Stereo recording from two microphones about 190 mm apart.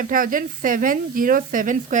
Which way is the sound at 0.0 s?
45° right (ahead or behind).